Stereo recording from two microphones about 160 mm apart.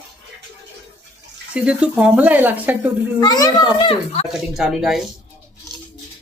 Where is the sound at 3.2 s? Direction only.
25° left (ahead or behind).